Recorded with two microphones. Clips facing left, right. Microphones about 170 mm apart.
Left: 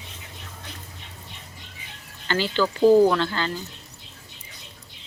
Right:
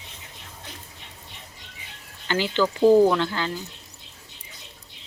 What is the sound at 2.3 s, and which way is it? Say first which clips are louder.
Speech: even; 15° right (ahead or behind).